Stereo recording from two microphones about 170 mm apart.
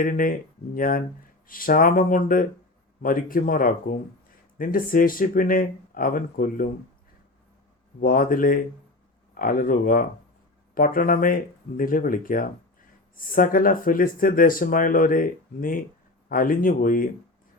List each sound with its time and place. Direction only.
0.0 s speech: 55° left (ahead or behind)
8.0 s speech: 55° left (ahead or behind)